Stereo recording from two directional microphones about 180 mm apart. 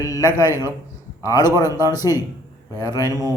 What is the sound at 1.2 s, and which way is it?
A man's voice, 20° left (ahead or behind).